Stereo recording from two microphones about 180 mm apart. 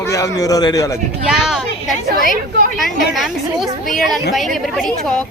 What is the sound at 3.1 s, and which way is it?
A woman's voice, centre (ahead or behind).